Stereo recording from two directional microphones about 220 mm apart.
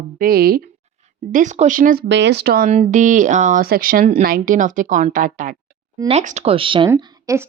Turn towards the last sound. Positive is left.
turn(degrees=-10)  # may be behind; listen again after turning